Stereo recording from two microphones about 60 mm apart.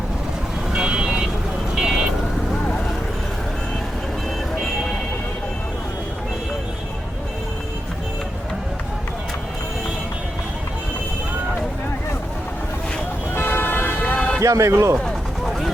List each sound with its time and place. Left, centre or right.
0.7 s vehicle: centre
13.3 s vehicle: left
14.2 s music: left
14.4 s speech: right